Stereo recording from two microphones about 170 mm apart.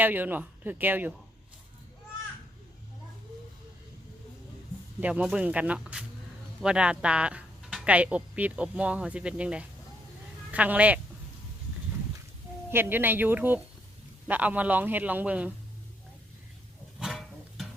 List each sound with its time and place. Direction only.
0.0 s speech: 10° right (ahead or behind)
4.9 s speech: 10° right (ahead or behind)
12.7 s speech: 10° right (ahead or behind)
17.0 s a sound: centre (ahead or behind)